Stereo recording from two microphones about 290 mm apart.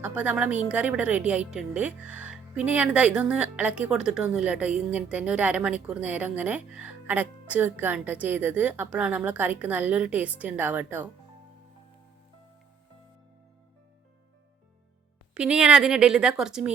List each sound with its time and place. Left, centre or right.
0.0 s a woman's voice: centre
15.4 s a woman's voice: centre